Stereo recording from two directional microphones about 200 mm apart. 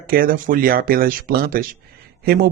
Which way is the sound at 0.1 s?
45° right (ahead or behind).